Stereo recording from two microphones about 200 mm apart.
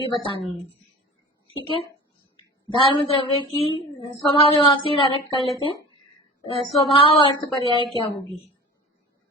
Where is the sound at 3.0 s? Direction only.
30° left (ahead or behind).